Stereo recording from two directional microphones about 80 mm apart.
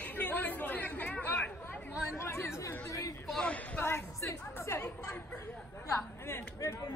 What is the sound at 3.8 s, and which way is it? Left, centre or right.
A woman's voice, left.